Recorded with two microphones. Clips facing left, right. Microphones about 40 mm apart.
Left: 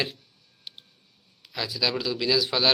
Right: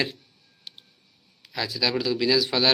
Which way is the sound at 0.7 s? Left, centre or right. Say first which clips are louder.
Left 1 dB; centre.